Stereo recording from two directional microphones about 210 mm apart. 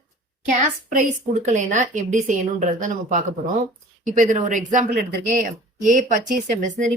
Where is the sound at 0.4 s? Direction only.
35° right (ahead or behind).